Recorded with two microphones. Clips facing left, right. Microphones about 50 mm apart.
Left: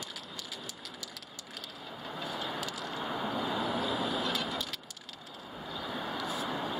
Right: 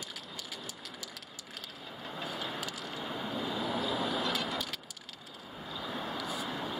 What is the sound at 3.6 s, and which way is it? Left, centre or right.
Vehicle, centre.